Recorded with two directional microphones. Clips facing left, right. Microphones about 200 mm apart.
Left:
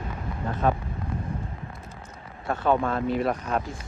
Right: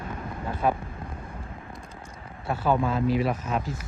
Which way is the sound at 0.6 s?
10° right (ahead or behind).